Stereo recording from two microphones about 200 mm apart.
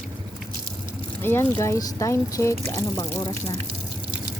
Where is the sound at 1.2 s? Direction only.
10° left (ahead or behind).